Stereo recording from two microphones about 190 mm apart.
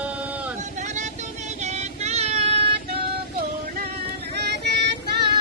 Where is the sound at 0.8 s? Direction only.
40° right (ahead or behind).